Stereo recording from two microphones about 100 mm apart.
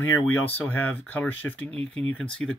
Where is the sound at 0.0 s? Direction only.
20° left (ahead or behind).